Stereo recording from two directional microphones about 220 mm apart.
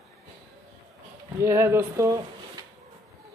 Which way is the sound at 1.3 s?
10° right (ahead or behind).